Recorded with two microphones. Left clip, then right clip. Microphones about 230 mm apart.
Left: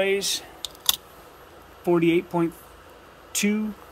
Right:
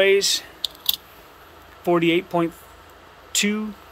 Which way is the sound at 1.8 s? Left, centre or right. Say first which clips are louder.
Right 2 dB; centre.